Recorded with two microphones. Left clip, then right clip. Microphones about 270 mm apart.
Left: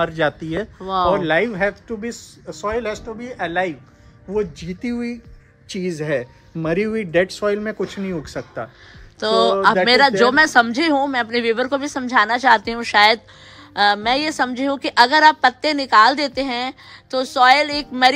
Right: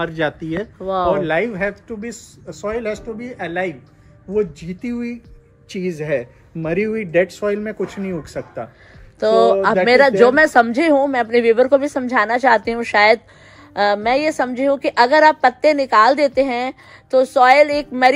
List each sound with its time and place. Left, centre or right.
0.0 s speech: left
0.7 s a woman's voice: centre
1.1 s speech: left
9.2 s a woman's voice: centre